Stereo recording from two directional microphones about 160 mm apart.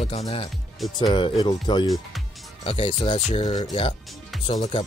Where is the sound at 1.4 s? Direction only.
30° left (ahead or behind).